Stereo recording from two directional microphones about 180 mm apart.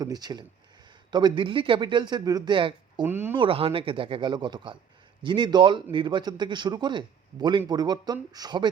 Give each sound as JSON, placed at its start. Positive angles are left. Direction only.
{"t": 0.0, "sound": "speech", "side_deg": -20}
{"t": 3.1, "sound": "speech", "side_deg": -10}
{"t": 3.3, "sound": "speech", "side_deg": -30}